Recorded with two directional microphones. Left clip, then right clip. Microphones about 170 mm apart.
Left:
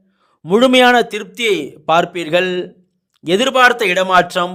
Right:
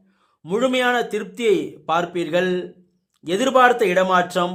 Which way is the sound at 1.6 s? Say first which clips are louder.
Left 7 dB; 25° left (ahead or behind).